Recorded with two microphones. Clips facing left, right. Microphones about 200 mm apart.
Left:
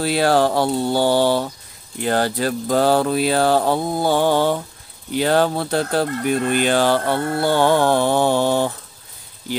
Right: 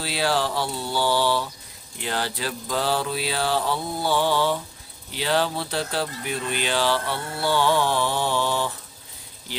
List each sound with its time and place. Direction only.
0.0 s speech: 50° left (ahead or behind)